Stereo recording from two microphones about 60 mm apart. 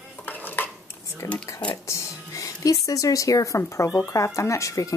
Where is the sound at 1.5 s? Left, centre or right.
Left.